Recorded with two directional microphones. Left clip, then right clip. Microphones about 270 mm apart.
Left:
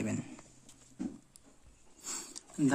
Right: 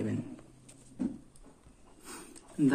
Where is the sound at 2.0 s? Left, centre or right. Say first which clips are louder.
Left 4 dB; left.